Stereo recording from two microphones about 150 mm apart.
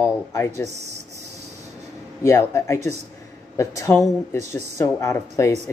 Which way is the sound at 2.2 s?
20° left (ahead or behind).